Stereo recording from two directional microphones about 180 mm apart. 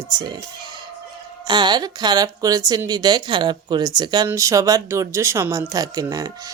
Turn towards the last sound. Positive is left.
turn(degrees=-20)  # may be behind; listen again after turning